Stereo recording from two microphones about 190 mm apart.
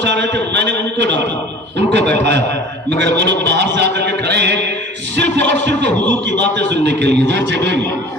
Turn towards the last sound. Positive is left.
turn(degrees=-65)  # may be behind; listen again after turning